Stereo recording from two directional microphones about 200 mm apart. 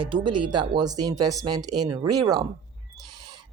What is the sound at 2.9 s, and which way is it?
Owl, 20° right (ahead or behind).